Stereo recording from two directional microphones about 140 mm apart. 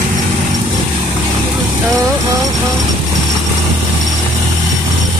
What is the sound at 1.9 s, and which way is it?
Vehicle, 25° right (ahead or behind).